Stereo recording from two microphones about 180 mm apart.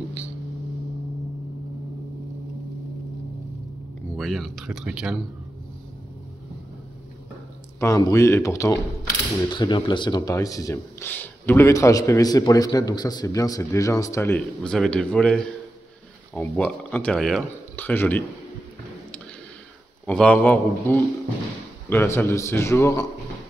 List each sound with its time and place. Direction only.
4.2 s speech: centre (ahead or behind)
7.8 s speech: 15° left (ahead or behind)
20.1 s speech: 5° left (ahead or behind)